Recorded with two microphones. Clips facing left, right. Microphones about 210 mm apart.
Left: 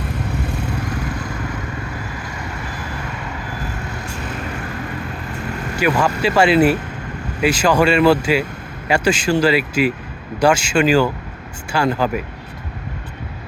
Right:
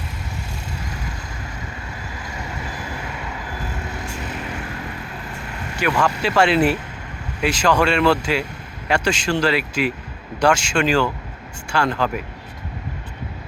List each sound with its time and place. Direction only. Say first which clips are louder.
0.4 s vehicle: left 9 dB; 60° left (ahead or behind)
5.8 s speech: left 3 dB; 5° left (ahead or behind)